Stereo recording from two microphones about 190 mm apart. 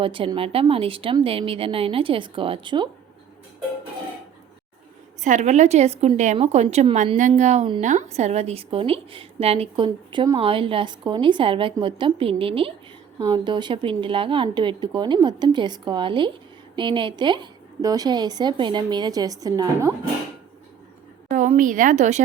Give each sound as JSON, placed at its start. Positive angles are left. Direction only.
{"t": 0.0, "sound": "a woman's voice", "side_deg": -25}
{"t": 5.2, "sound": "a woman's voice", "side_deg": -40}
{"t": 21.2, "sound": "a woman's voice", "side_deg": -40}